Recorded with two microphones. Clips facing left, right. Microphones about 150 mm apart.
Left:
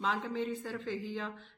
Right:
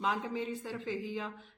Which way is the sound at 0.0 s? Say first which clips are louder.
Even; 10° right (ahead or behind).